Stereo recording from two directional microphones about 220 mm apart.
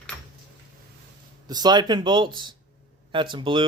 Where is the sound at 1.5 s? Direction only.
20° right (ahead or behind).